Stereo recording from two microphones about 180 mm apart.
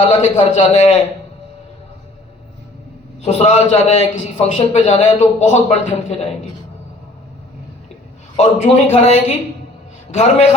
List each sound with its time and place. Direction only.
0.2 s a man's voice: 40° left (ahead or behind)
3.2 s a man's voice: 40° left (ahead or behind)
8.4 s a man's voice: 40° left (ahead or behind)